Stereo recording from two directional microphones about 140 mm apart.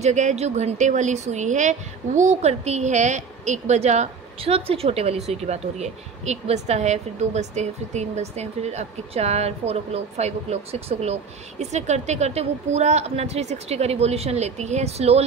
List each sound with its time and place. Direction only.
0.0 s speech: 55° right (ahead or behind)